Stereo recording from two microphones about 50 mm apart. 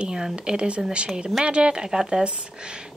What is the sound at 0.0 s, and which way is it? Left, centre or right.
A woman's voice, centre.